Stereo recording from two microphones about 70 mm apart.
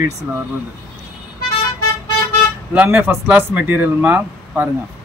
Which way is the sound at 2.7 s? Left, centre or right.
Centre.